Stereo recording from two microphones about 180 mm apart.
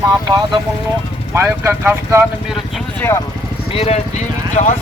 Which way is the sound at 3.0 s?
15° left (ahead or behind).